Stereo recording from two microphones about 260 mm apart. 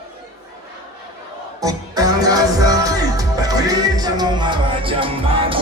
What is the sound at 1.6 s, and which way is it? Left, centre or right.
Music, centre.